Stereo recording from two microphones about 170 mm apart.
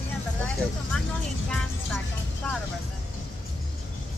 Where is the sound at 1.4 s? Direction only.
5° left (ahead or behind).